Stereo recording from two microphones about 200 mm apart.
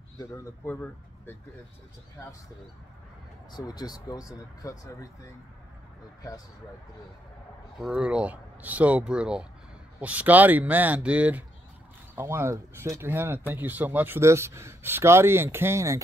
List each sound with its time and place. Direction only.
0.2 s speech: 15° left (ahead or behind)
3.5 s speech: 20° left (ahead or behind)
7.8 s a man's voice: 5° right (ahead or behind)